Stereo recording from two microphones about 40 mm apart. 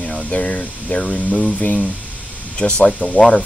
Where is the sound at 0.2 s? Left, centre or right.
Left.